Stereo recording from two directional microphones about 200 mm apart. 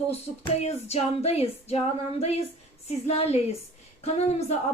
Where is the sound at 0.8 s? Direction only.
30° left (ahead or behind).